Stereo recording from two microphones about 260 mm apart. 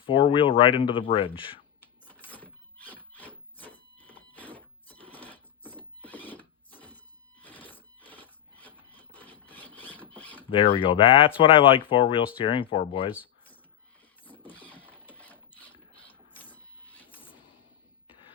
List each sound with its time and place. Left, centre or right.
0.0 s speech: centre
2.0 s wood: centre
4.4 s neigh: centre
7.4 s wood: centre
10.5 s speech: centre
13.2 s a sound: centre
14.3 s printer: centre
15.1 s sewing machine: centre
16.5 s printer: centre